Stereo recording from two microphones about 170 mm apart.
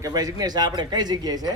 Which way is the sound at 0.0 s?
20° right (ahead or behind).